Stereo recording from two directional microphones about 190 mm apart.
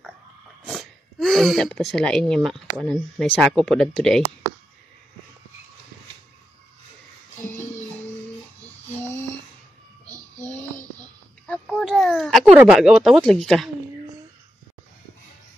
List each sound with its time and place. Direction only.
0.7 s speech: centre (ahead or behind)
7.3 s music: 45° left (ahead or behind)
11.4 s a sound: 5° left (ahead or behind)
12.5 s speech: 5° right (ahead or behind)